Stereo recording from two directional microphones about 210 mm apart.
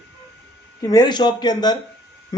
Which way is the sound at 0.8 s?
20° left (ahead or behind).